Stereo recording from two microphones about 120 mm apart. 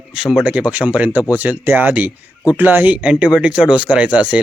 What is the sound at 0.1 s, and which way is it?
Speech, 5° right (ahead or behind).